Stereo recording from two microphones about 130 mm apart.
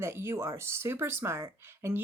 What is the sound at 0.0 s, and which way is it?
Speech, 20° right (ahead or behind).